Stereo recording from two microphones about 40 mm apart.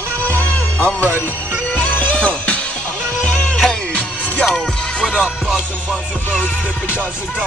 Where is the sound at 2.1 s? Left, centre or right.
Left.